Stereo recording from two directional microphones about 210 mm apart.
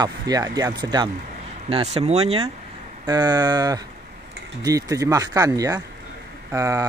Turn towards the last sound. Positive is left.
turn(degrees=-15)  # may be behind; listen again after turning